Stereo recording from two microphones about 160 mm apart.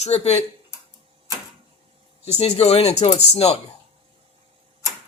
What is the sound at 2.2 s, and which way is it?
Speech, 40° left (ahead or behind).